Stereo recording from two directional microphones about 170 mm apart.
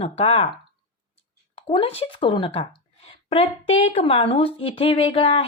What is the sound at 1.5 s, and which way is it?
Speech, 35° left (ahead or behind).